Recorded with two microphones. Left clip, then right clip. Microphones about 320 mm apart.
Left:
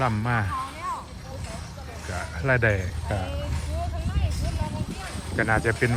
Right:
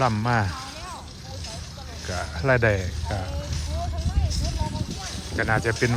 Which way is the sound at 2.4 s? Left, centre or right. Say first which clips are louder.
Right 2 dB; centre.